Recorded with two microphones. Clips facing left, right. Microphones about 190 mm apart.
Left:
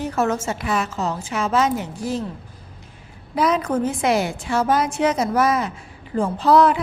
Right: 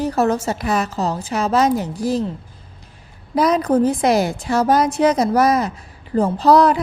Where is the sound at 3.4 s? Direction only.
40° right (ahead or behind).